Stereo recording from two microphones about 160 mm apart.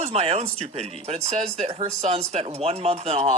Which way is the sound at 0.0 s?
40° right (ahead or behind).